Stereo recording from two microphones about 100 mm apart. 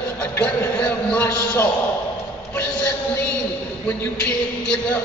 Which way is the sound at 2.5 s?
15° left (ahead or behind).